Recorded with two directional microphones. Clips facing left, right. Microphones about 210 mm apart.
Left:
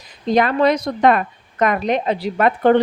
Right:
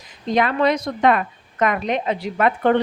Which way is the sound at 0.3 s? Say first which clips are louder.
Left 3 dB; 40° left (ahead or behind).